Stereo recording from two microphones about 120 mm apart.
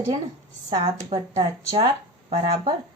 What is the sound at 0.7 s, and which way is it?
Speech, 60° right (ahead or behind).